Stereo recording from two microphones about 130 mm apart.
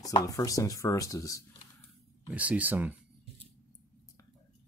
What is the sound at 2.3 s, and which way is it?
Speech, 10° right (ahead or behind).